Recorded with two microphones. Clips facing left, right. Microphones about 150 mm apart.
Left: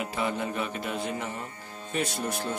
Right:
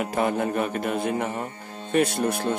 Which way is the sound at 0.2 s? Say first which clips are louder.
Right 6 dB; 50° right (ahead or behind).